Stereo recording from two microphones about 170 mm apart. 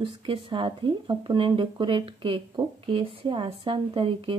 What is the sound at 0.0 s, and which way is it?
Speech, 30° right (ahead or behind).